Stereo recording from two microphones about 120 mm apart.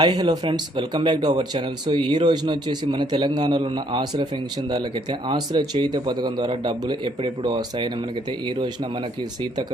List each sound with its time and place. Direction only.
0.0 s speech: 35° right (ahead or behind)
5.3 s speech: 40° right (ahead or behind)